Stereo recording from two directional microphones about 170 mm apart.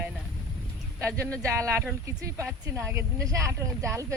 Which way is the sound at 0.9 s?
15° right (ahead or behind).